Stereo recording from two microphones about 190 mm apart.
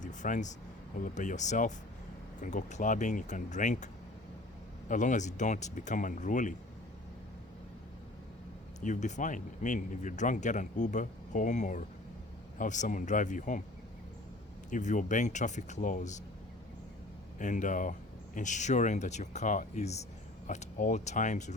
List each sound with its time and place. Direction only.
0.0 s a sound: 40° left (ahead or behind)
0.9 s speech: 45° left (ahead or behind)
4.9 s speech: 40° left (ahead or behind)
8.8 s speech: 40° left (ahead or behind)
14.7 s speech: 40° left (ahead or behind)
17.3 s speech: 40° left (ahead or behind)